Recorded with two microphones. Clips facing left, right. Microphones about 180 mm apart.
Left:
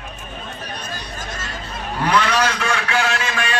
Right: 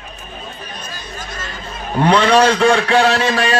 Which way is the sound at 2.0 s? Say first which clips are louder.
Right 7 dB; 30° right (ahead or behind).